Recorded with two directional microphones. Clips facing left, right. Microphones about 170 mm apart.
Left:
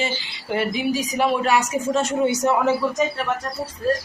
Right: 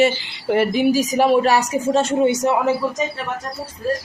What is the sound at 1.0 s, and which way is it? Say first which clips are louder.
Speech: right 6 dB; 40° right (ahead or behind).